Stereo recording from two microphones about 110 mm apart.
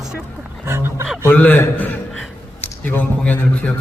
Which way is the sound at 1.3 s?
15° left (ahead or behind).